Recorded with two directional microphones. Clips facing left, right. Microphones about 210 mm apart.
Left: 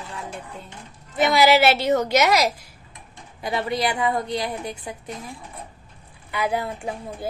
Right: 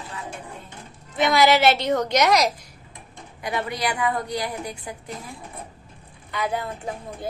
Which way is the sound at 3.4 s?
25° left (ahead or behind).